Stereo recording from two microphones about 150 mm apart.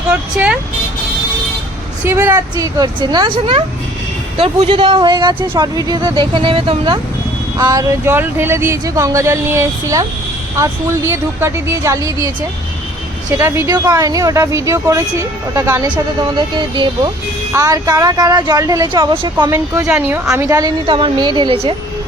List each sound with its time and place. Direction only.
0.1 s speech: 10° right (ahead or behind)
2.0 s a woman's voice: 15° right (ahead or behind)
13.7 s speech: 25° right (ahead or behind)
16.6 s speech: 30° right (ahead or behind)
19.1 s speech: 35° right (ahead or behind)
19.5 s a woman's voice: 20° right (ahead or behind)
20.8 s speech: 35° right (ahead or behind)